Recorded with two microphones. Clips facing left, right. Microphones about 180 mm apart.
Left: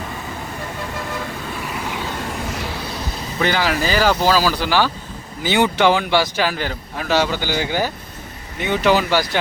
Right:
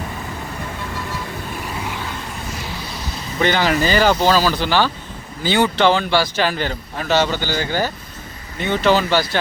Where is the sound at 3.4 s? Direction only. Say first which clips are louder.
Right 2 dB; 5° left (ahead or behind).